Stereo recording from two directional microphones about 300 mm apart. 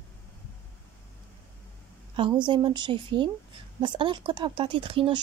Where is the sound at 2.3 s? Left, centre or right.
Centre.